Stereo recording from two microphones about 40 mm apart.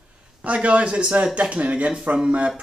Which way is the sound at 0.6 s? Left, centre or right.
Right.